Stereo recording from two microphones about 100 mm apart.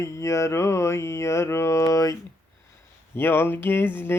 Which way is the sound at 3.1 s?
25° left (ahead or behind).